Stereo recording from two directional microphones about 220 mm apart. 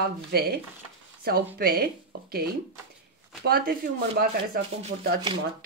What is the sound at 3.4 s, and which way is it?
Speech, 40° right (ahead or behind).